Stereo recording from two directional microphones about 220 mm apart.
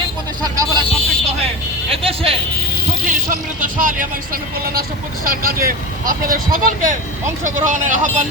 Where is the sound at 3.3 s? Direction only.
35° right (ahead or behind).